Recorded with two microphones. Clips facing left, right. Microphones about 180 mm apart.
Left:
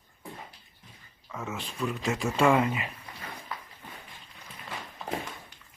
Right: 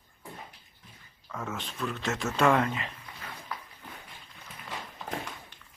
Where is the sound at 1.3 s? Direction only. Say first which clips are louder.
Even; 5° left (ahead or behind).